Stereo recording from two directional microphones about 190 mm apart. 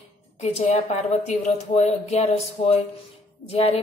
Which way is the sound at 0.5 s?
35° left (ahead or behind).